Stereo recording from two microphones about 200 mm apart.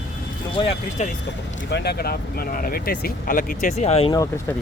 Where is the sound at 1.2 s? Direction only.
55° left (ahead or behind); by 4.1 s 30° left (ahead or behind).